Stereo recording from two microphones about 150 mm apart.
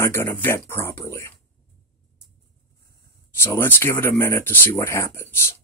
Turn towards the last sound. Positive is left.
turn(degrees=15)  # may be behind; listen again after turning